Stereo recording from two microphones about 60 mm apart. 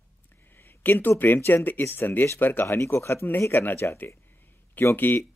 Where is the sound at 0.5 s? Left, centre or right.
Left.